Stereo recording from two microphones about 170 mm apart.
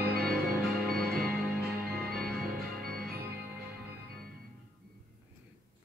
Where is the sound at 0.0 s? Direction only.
65° right (ahead or behind).